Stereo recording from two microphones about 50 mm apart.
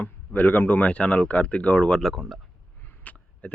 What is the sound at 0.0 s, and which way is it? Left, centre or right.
Speech, left.